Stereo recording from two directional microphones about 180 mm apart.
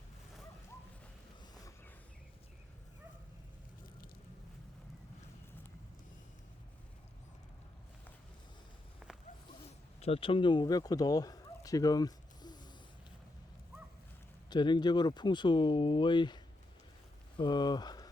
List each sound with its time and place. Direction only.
10.0 s a man's voice: 30° left (ahead or behind)
14.5 s speech: 25° left (ahead or behind)